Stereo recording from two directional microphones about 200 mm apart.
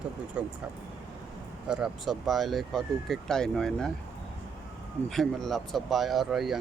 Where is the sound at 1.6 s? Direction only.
5° right (ahead or behind).